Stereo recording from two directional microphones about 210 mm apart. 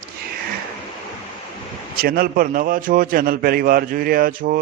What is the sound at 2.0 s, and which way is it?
Speech, 45° right (ahead or behind).